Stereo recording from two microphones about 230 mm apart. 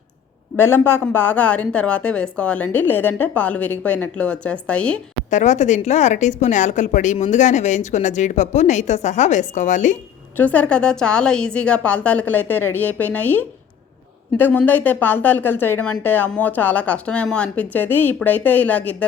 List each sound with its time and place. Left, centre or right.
0.5 s a woman's voice: centre
5.3 s a woman's voice: left
10.3 s speech: centre